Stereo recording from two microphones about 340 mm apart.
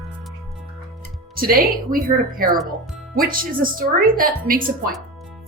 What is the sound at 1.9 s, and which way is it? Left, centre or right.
A woman's voice, right.